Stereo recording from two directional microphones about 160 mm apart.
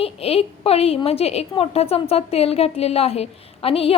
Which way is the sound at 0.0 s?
40° left (ahead or behind).